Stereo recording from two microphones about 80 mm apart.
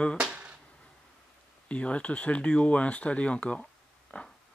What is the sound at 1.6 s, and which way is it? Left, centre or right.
Speech, centre.